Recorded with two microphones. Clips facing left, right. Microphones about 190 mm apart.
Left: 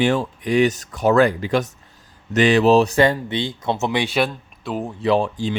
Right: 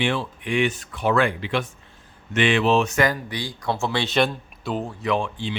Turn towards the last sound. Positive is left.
turn(degrees=40)  # may be behind; listen again after turning